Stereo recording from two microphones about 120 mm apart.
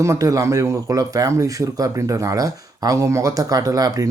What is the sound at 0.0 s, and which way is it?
Speech, 25° right (ahead or behind).